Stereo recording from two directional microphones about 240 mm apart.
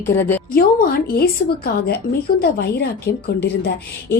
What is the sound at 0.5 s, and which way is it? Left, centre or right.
A woman's voice, left.